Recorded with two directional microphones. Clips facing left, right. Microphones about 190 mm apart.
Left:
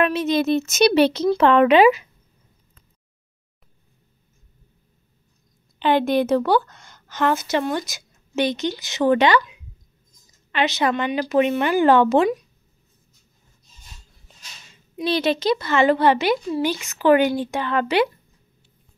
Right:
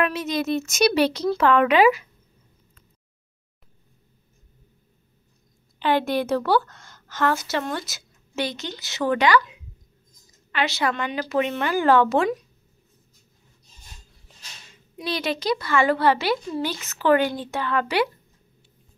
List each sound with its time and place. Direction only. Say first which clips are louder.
0.0 s a woman's voice: left 5 dB; 25° left (ahead or behind)
5.8 s a woman's voice: left 4 dB; 20° left (ahead or behind)
10.5 s a woman's voice: left 4 dB; 20° left (ahead or behind)
15.0 s a woman's voice: left 6 dB; 25° left (ahead or behind)